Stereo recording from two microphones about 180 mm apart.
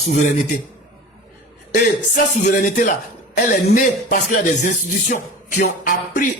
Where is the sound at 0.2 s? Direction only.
40° left (ahead or behind).